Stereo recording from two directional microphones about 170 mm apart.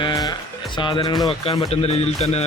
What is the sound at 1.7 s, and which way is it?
Speech, 40° left (ahead or behind).